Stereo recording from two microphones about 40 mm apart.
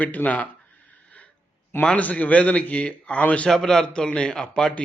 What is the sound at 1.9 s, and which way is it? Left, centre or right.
A man's voice, left.